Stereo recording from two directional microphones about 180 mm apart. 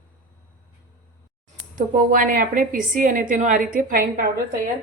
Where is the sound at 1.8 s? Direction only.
50° right (ahead or behind).